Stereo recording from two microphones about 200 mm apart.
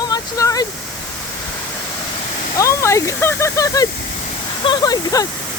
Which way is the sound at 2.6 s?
15° left (ahead or behind).